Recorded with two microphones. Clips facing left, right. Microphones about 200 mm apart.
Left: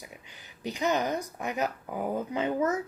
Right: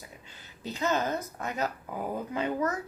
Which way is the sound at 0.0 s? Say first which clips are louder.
Left 1 dB; 15° left (ahead or behind).